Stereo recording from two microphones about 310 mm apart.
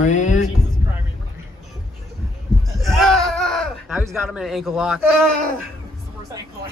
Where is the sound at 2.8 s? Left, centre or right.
Centre.